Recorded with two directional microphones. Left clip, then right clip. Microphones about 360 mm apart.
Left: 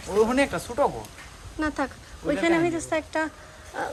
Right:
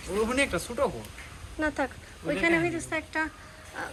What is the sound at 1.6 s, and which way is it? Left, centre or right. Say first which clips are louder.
Speech: left 1 dB; centre.